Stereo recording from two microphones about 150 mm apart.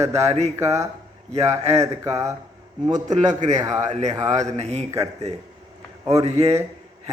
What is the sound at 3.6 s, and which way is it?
Speech, 20° right (ahead or behind).